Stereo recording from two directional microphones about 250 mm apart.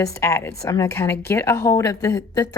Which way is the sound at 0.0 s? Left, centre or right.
Centre.